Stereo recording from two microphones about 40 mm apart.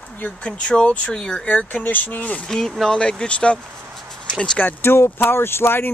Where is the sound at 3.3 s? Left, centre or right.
Left.